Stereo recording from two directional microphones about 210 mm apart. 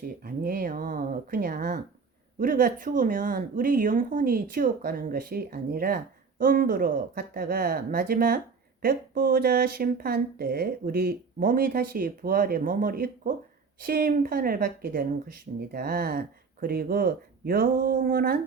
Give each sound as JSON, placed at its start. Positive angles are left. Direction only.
{"t": 0.2, "sound": "speech", "side_deg": -45}